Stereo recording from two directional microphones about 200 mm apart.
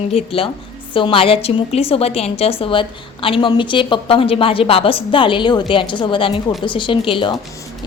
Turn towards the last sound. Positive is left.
turn(degrees=25)  # may be behind; listen again after turning